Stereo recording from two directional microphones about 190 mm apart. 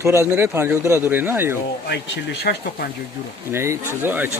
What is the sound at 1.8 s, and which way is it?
Speech, 65° left (ahead or behind).